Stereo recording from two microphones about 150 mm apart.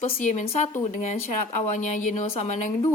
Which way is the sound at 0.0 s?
50° left (ahead or behind).